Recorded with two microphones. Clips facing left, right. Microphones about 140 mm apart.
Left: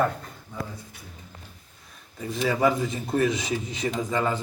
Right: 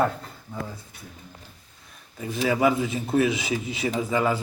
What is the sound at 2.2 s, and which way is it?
A man's voice, 5° right (ahead or behind).